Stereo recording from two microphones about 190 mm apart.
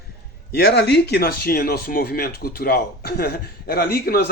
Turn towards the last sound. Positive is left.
turn(degrees=50)  # may be behind; listen again after turning